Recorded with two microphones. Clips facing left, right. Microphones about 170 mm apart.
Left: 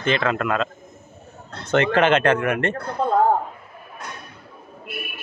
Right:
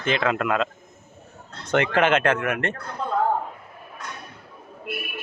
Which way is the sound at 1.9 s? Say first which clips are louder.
Left 3 dB; 5° right (ahead or behind).